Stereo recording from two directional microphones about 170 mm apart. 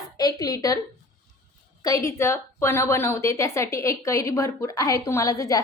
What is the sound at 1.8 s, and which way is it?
A woman's voice, 20° left (ahead or behind).